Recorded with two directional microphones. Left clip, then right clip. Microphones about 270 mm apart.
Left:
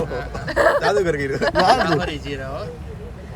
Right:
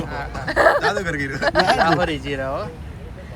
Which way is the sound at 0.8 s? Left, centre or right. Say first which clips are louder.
Left 2 dB; left.